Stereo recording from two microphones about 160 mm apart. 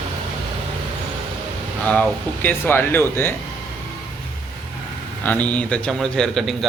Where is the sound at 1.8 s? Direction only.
10° left (ahead or behind).